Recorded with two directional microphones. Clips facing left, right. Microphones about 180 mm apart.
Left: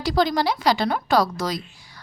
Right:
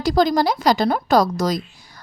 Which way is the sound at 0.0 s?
45° right (ahead or behind).